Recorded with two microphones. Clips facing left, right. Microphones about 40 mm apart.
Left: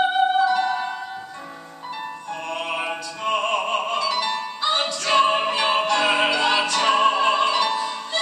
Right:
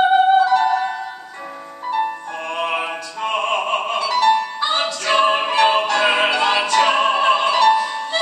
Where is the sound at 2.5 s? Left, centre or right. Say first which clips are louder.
Right 5 dB; right.